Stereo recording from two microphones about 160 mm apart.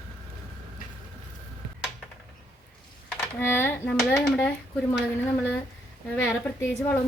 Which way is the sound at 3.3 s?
15° left (ahead or behind).